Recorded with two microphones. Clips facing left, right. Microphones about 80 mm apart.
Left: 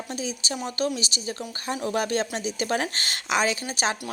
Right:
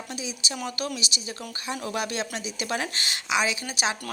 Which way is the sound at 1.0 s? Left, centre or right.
Left.